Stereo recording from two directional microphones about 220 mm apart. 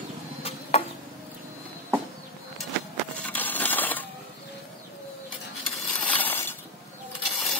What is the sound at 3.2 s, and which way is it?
Crushing, 5° left (ahead or behind).